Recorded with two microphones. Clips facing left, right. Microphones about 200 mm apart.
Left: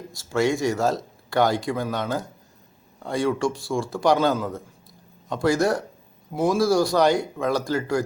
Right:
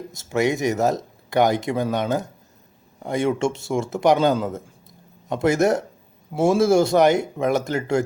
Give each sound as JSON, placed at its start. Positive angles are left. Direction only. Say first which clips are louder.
{"t": 0.1, "sound": "speech", "louder": "right 1 dB", "side_deg": -20}